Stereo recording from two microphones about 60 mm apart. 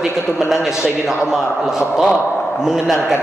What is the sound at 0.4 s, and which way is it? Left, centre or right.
A man's voice, centre.